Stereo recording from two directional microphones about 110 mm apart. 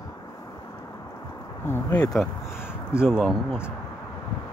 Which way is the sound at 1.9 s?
35° left (ahead or behind).